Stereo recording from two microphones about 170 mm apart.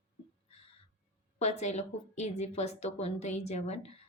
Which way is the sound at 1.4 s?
40° left (ahead or behind).